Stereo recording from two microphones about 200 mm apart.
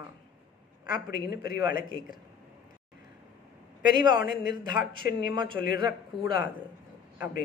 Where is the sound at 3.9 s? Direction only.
20° right (ahead or behind).